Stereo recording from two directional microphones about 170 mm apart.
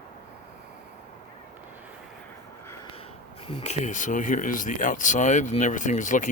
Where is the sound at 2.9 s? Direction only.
35° left (ahead or behind).